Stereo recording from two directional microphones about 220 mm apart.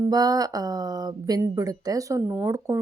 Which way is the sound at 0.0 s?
15° right (ahead or behind).